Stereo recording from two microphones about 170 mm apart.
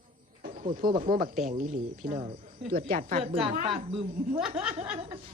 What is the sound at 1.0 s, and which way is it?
A woman's voice, 55° right (ahead or behind).